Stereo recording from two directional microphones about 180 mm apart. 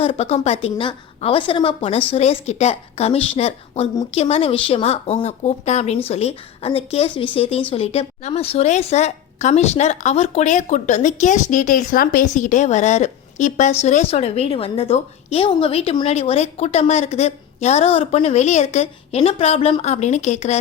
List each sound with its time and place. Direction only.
0.0 s a woman's voice: 35° left (ahead or behind)